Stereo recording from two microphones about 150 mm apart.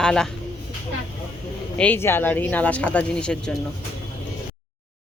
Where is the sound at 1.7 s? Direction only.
10° left (ahead or behind).